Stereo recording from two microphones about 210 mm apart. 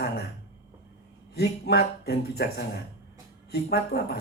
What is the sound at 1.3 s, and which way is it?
Speech, 50° left (ahead or behind).